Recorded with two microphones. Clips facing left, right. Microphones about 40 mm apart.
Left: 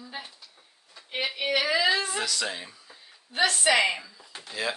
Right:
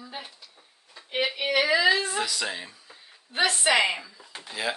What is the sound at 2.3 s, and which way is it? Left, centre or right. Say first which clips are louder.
Speech: even; centre.